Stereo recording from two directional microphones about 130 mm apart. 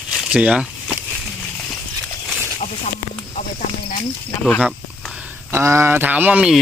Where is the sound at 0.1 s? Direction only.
5° right (ahead or behind).